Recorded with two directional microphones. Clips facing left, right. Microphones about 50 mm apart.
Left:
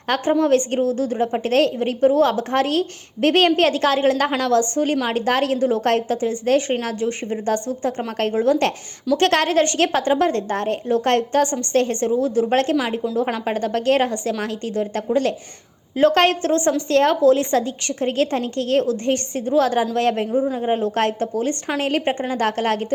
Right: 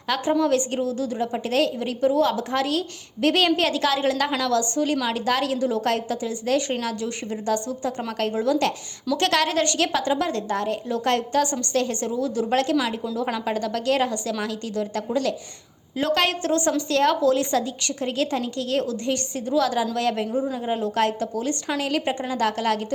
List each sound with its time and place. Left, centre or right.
0.1 s a woman's voice: left
20.2 s a woman's voice: left